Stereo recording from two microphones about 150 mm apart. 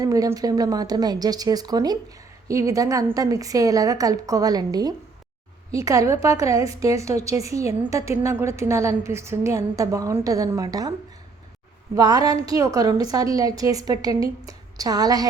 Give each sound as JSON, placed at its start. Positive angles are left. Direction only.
{"t": 0.0, "sound": "a woman's voice", "side_deg": -25}
{"t": 11.9, "sound": "a woman's voice", "side_deg": -25}